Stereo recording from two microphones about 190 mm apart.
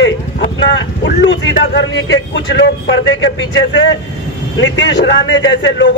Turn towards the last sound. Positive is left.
turn(degrees=70)  # may be behind; listen again after turning